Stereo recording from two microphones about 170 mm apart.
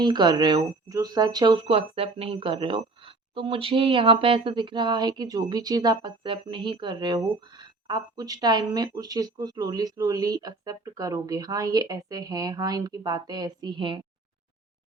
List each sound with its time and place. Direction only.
0.0 s speech: 25° right (ahead or behind)